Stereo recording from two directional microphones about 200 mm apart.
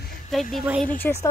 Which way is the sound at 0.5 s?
5° right (ahead or behind).